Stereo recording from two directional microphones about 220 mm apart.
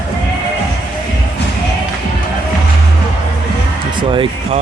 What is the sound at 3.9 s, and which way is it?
Music, 25° right (ahead or behind).